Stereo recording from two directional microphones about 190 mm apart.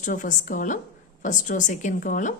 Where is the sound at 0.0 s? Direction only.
45° left (ahead or behind).